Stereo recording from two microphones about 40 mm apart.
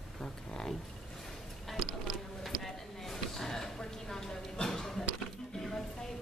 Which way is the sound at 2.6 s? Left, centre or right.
Centre.